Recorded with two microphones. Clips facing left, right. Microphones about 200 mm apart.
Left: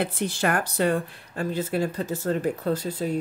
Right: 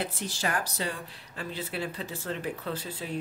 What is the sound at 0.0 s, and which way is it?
Speech, 60° left (ahead or behind).